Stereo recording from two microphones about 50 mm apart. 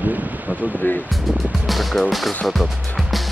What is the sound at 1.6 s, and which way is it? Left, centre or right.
Speech, centre.